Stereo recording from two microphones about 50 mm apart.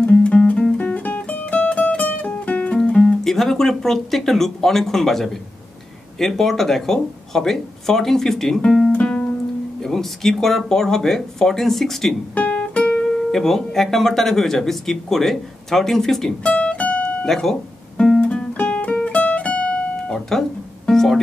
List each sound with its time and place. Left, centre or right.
0.0 s music: centre
2.8 s speech: centre
8.9 s music: centre
9.8 s speech: centre
12.4 s music: left
13.3 s speech: centre
16.5 s music: left
17.2 s speech: centre
18.2 s music: left
20.1 s music: centre